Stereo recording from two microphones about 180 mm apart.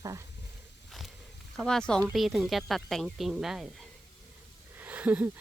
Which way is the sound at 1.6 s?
5° left (ahead or behind).